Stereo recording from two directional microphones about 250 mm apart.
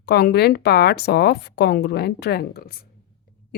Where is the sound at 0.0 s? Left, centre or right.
Left.